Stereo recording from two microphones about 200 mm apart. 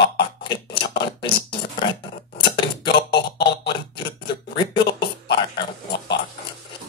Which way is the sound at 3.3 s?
60° left (ahead or behind).